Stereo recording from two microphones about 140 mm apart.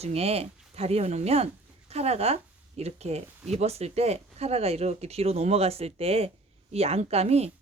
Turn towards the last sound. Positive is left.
turn(degrees=-50)  # may be behind; listen again after turning